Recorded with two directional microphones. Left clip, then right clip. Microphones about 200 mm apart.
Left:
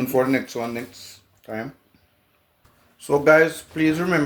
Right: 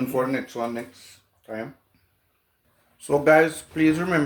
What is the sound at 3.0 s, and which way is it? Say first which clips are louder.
Speech: left 2 dB; centre (ahead or behind).